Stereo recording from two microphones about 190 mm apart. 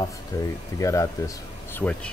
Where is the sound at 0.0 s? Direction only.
20° left (ahead or behind).